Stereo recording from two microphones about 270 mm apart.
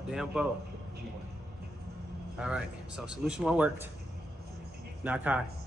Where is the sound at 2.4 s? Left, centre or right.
Centre.